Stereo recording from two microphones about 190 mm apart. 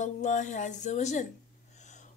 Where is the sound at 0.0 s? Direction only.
40° left (ahead or behind).